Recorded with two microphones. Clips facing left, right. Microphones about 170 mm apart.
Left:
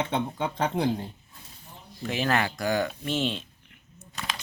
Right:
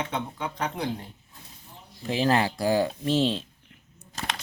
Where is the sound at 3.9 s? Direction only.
35° right (ahead or behind).